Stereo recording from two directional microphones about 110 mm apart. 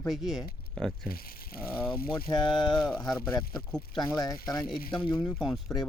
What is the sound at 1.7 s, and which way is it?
Speech, 45° left (ahead or behind).